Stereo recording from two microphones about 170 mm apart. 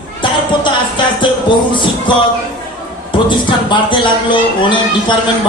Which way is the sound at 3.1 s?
30° left (ahead or behind).